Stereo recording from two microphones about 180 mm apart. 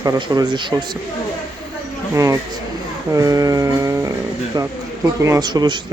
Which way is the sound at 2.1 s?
15° right (ahead or behind).